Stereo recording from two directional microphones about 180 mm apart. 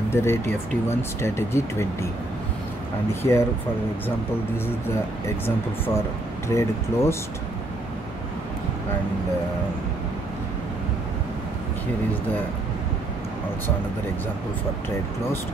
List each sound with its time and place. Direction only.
0.1 s speech: 15° left (ahead or behind)
3.2 s speech: 15° left (ahead or behind)
6.5 s speech: 15° left (ahead or behind)